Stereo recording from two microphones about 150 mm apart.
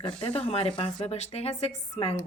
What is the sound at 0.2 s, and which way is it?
Speech, 40° left (ahead or behind).